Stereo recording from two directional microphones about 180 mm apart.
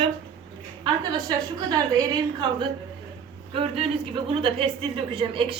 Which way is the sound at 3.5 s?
30° right (ahead or behind).